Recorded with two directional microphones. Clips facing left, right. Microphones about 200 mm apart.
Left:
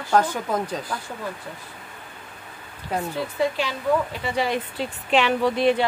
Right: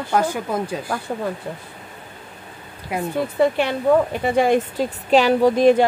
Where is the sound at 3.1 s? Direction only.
60° right (ahead or behind).